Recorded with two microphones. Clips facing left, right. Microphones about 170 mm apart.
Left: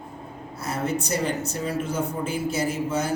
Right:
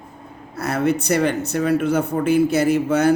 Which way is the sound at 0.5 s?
65° right (ahead or behind).